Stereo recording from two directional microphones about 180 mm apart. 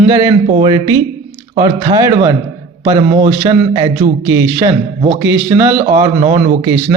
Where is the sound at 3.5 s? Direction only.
20° right (ahead or behind).